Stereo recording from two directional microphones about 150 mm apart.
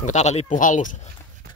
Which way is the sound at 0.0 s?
50° left (ahead or behind).